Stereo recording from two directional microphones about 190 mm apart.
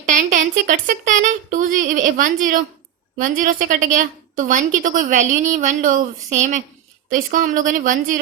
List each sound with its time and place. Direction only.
0.0 s a woman's voice: 40° right (ahead or behind)